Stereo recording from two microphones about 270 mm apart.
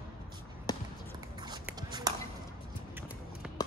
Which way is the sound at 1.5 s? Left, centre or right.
Centre.